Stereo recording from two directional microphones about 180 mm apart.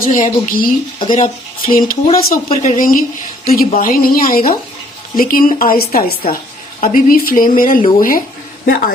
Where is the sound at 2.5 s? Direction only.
45° left (ahead or behind).